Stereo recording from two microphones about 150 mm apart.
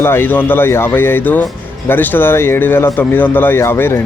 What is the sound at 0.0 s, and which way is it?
Speech, 15° left (ahead or behind).